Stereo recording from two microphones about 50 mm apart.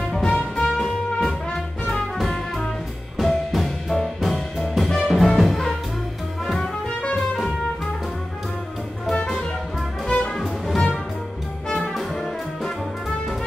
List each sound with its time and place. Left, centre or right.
0.2 s music: centre
0.7 s music: centre
9.1 s music: left
10.3 s music: centre